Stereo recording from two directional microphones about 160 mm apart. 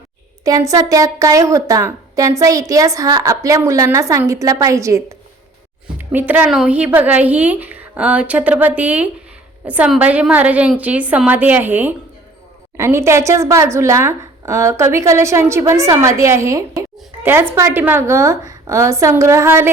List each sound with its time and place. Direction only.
0.4 s a woman's voice: 20° right (ahead or behind)